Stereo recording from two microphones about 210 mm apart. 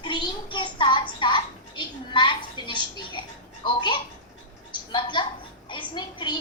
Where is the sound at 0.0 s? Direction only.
20° left (ahead or behind).